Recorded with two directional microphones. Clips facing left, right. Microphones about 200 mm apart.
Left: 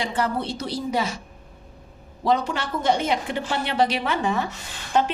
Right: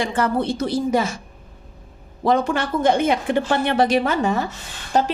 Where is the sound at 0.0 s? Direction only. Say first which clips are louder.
Right 4 dB; 50° right (ahead or behind).